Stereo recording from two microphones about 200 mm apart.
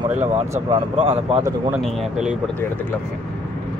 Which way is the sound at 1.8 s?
5° right (ahead or behind).